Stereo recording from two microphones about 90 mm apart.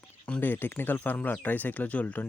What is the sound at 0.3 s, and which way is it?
Speech, 20° left (ahead or behind).